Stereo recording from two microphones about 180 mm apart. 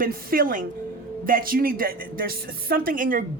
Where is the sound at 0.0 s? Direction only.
55° right (ahead or behind).